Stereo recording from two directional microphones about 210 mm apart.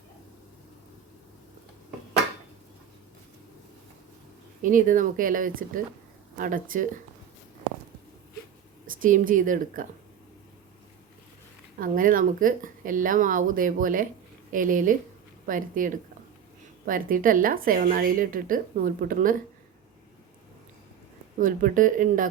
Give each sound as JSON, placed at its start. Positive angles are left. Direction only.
{"t": 4.6, "sound": "a woman's voice", "side_deg": -40}
{"t": 9.0, "sound": "a woman's voice", "side_deg": -40}
{"t": 11.8, "sound": "a woman's voice", "side_deg": -40}
{"t": 21.3, "sound": "a woman's voice", "side_deg": -40}